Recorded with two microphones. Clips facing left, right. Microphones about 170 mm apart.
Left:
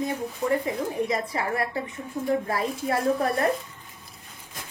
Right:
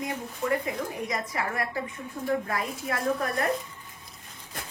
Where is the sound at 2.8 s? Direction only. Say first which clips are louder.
Left 5 dB; 30° left (ahead or behind).